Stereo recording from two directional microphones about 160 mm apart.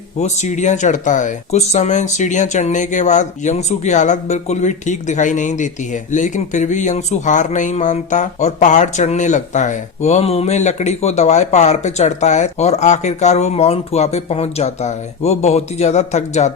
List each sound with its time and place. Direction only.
0.2 s speech: 45° left (ahead or behind)